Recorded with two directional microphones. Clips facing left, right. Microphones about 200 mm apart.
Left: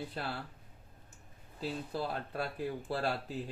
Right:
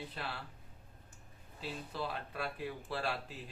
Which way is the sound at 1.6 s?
40° left (ahead or behind).